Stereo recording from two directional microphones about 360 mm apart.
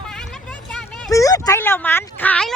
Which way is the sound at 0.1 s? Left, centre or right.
Centre.